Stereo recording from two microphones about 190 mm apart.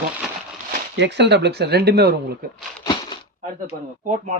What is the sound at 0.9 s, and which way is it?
Speech, 65° right (ahead or behind).